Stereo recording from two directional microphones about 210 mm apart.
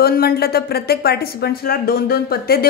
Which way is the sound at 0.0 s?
45° left (ahead or behind).